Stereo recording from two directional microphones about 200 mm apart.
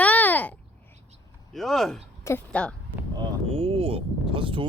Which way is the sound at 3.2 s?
25° right (ahead or behind).